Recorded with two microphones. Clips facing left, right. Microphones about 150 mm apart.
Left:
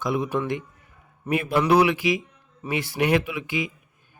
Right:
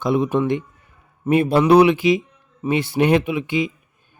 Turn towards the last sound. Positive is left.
turn(degrees=-25)  # may be behind; listen again after turning